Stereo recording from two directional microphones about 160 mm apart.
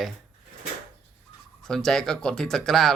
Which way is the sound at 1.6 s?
5° left (ahead or behind).